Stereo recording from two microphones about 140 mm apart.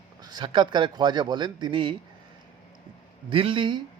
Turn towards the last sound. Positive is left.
turn(degrees=-35)  # may be behind; listen again after turning